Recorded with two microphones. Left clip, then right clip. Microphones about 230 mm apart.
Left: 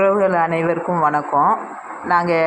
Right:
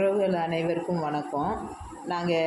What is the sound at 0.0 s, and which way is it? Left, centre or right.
Speech, centre.